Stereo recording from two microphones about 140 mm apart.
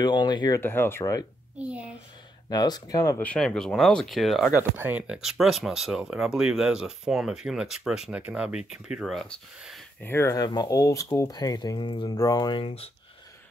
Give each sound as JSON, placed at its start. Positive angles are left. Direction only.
{"t": 0.0, "sound": "speech", "side_deg": 35}
{"t": 0.6, "sound": "speech", "side_deg": 15}
{"t": 2.5, "sound": "speech", "side_deg": 30}
{"t": 3.2, "sound": "speech", "side_deg": 5}
{"t": 4.5, "sound": "speech", "side_deg": -15}
{"t": 10.0, "sound": "speech", "side_deg": 20}